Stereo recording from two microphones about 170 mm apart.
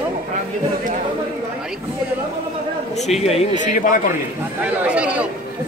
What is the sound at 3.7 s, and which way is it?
Speech, 50° left (ahead or behind).